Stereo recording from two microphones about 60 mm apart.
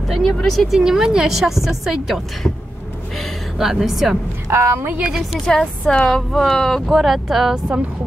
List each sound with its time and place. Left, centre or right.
0.1 s a woman's voice: centre
0.7 s a woman's voice: centre
4.5 s a woman's voice: right
5.4 s a woman's voice: centre